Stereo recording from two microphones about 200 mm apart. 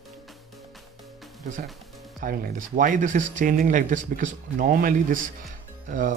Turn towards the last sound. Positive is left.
turn(degrees=-40)  # may be behind; listen again after turning